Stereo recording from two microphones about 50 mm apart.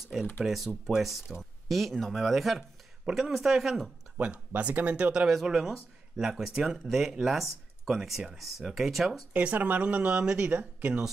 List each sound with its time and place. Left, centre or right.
0.1 s speech: centre
4.6 s speech: right
5.3 s speech: centre
9.3 s speech: right
10.1 s speech: centre
10.4 s speech: right